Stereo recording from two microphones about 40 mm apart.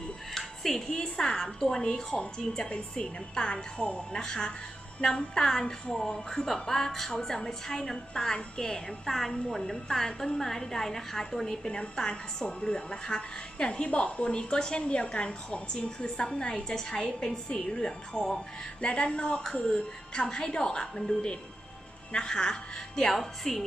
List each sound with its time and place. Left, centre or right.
0.3 s music: centre
0.9 s a woman's voice: centre